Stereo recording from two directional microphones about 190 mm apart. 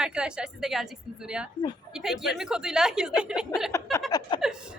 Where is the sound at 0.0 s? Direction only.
5° right (ahead or behind).